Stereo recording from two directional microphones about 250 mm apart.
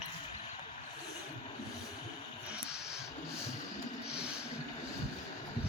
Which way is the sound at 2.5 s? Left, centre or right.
Centre.